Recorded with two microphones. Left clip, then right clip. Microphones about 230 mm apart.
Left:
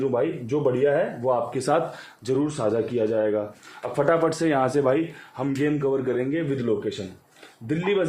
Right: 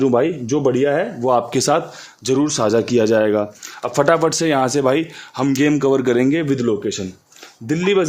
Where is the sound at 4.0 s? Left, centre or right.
Right.